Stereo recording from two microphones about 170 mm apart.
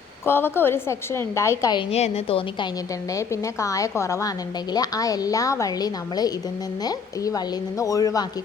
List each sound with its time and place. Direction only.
0.3 s a woman's voice: 15° left (ahead or behind)
1.9 s a woman's voice: 40° left (ahead or behind)
3.1 s a woman's voice: 20° left (ahead or behind)